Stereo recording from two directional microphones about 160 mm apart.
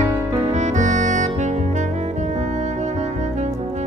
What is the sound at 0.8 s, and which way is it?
Saxophone, 50° right (ahead or behind).